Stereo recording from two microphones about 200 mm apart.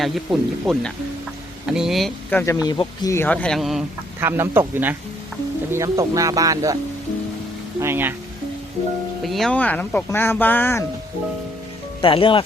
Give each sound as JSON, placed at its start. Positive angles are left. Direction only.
{"t": 0.0, "sound": "speech", "side_deg": 0}
{"t": 2.5, "sound": "speech", "side_deg": 20}
{"t": 7.8, "sound": "speech", "side_deg": -10}
{"t": 9.2, "sound": "speech", "side_deg": 0}
{"t": 12.0, "sound": "speech", "side_deg": 25}